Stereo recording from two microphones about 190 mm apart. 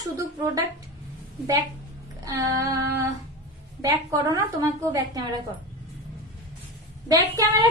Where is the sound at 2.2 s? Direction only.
20° right (ahead or behind).